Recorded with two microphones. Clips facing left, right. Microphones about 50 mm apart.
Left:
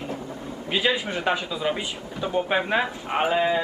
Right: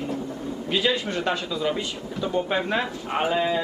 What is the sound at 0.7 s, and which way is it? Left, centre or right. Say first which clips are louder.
Speech: even; centre.